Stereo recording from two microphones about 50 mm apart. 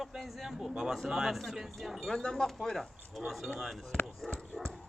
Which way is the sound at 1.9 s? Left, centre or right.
Centre.